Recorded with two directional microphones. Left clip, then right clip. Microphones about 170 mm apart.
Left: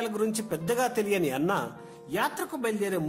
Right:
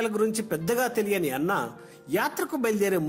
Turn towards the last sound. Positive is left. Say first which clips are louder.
# right 4 dB
turn(degrees=-20)  # may be behind; listen again after turning